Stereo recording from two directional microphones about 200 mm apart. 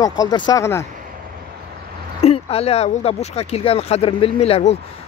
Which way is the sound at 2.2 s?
30° left (ahead or behind).